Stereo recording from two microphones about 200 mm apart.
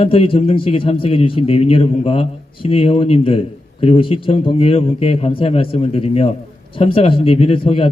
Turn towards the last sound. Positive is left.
turn(degrees=30)  # may be behind; listen again after turning